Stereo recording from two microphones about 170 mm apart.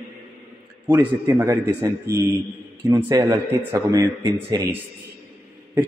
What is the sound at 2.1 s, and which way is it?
Speech, 70° right (ahead or behind).